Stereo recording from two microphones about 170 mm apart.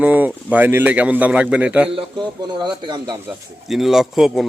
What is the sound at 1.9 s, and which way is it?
A man's voice, 30° right (ahead or behind).